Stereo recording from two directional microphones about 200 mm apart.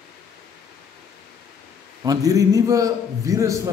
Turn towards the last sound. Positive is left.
turn(degrees=-15)  # may be behind; listen again after turning